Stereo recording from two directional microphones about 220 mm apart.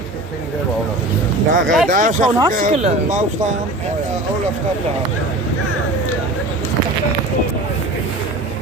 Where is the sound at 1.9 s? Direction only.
35° right (ahead or behind).